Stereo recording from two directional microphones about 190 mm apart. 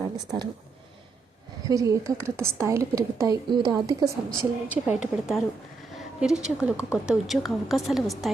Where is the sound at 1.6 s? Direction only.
15° right (ahead or behind).